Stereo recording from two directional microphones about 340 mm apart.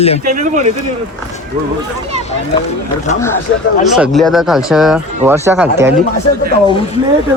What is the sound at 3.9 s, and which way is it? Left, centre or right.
Speech, centre.